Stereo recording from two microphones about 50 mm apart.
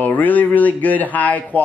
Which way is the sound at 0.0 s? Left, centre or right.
Left.